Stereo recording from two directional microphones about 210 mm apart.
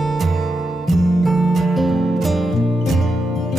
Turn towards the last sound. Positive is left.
turn(degrees=0)  # may be behind; listen again after turning